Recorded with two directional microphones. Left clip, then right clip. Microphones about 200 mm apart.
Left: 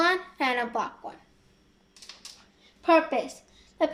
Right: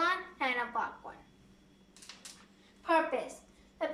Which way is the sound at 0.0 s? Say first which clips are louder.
Left 7 dB; 40° left (ahead or behind).